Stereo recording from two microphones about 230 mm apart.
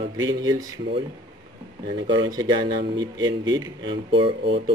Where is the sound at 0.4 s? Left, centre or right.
Centre.